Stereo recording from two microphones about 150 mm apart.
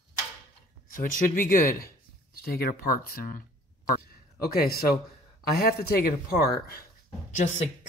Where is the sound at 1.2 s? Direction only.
65° left (ahead or behind).